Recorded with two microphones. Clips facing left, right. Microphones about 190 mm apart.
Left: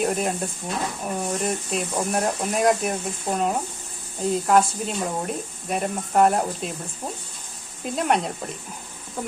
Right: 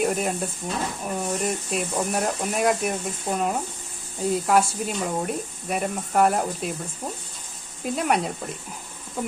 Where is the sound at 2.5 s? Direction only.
Centre (ahead or behind).